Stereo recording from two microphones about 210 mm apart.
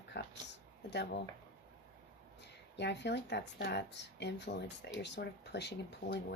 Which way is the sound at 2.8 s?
55° left (ahead or behind).